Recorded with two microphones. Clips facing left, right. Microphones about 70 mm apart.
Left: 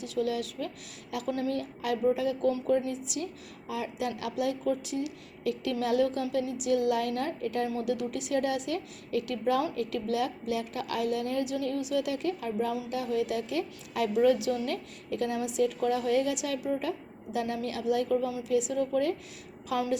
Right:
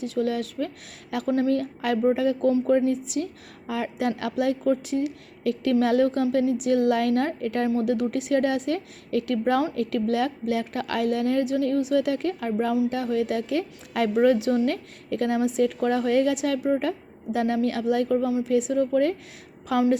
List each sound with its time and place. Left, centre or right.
0.0 s a woman's voice: right
1.5 s a woman's voice: right
14.4 s a woman's voice: right